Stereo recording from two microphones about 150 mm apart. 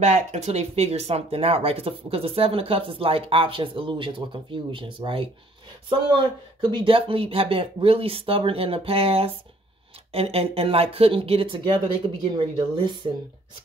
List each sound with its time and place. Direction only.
0.0 s speech: 50° right (ahead or behind); by 13.1 s 35° right (ahead or behind)